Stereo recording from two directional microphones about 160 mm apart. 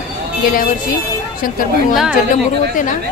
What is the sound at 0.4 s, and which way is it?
Speech, 60° left (ahead or behind).